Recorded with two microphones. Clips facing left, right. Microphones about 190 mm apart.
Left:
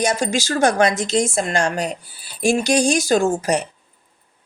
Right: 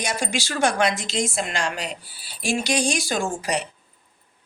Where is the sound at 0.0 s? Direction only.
45° left (ahead or behind).